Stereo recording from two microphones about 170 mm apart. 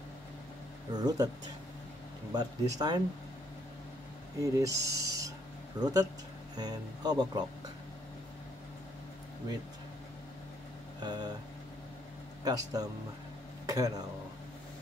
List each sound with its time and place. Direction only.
0.9 s speech: 25° right (ahead or behind)
2.3 s speech: 25° right (ahead or behind)
4.4 s speech: 20° right (ahead or behind)
11.0 s vehicle: 25° right (ahead or behind)
12.4 s speech: 20° right (ahead or behind)